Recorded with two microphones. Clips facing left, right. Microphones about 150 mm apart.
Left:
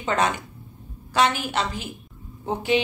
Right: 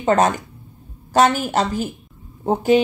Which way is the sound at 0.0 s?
45° right (ahead or behind).